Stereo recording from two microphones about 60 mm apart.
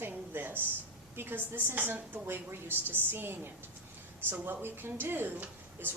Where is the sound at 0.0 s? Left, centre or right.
Right.